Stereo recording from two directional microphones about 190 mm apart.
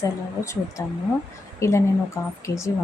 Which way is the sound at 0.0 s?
15° left (ahead or behind).